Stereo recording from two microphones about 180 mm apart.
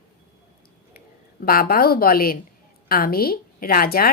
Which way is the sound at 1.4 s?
55° left (ahead or behind).